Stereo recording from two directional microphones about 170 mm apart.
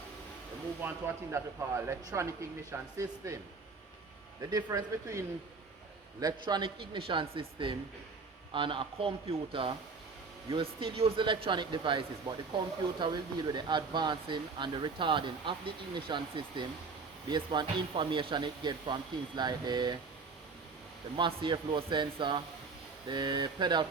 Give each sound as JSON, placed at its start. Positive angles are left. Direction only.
{"t": 0.8, "sound": "speech", "side_deg": -10}
{"t": 21.2, "sound": "speech", "side_deg": -30}